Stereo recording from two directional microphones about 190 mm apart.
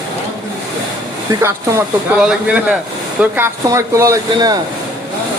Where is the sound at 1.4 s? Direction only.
15° right (ahead or behind).